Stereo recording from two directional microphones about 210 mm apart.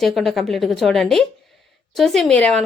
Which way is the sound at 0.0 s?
Centre (ahead or behind).